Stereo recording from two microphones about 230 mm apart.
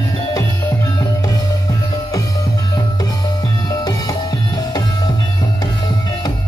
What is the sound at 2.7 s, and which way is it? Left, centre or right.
Music, centre.